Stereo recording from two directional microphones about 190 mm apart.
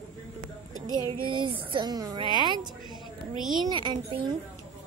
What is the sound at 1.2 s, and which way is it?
Speech, 25° right (ahead or behind).